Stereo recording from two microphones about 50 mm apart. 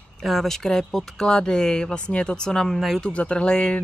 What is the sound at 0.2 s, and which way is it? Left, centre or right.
Speech, centre.